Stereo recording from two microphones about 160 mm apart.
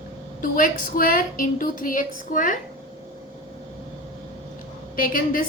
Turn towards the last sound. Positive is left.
turn(degrees=60)  # may be behind; listen again after turning